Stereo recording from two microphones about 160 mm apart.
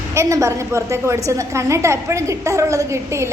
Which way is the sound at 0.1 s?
20° right (ahead or behind).